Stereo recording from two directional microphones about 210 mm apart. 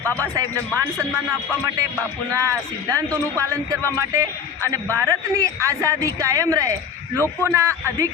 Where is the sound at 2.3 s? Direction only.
15° right (ahead or behind).